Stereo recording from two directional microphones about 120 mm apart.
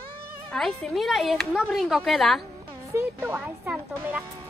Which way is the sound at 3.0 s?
20° right (ahead or behind).